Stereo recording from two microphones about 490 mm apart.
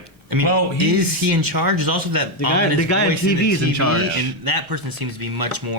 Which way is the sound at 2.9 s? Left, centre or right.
Left.